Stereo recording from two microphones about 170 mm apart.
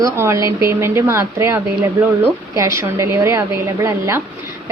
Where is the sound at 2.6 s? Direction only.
15° right (ahead or behind).